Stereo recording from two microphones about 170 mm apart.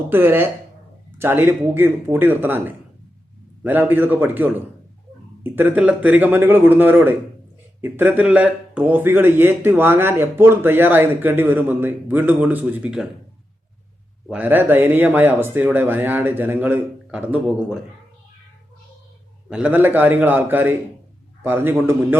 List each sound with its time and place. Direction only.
0.1 s speech: 10° right (ahead or behind)
14.3 s speech: 10° right (ahead or behind)
19.5 s speech: 5° right (ahead or behind)